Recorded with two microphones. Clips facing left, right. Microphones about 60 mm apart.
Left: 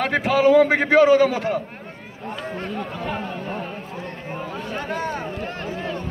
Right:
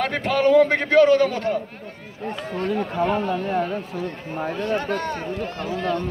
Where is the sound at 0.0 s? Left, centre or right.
Centre.